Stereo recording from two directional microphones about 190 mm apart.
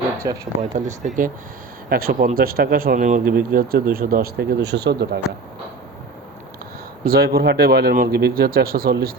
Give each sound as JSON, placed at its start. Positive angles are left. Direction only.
{"t": 0.2, "sound": "speech", "side_deg": -15}
{"t": 0.6, "sound": "speech", "side_deg": -40}
{"t": 7.0, "sound": "speech", "side_deg": -55}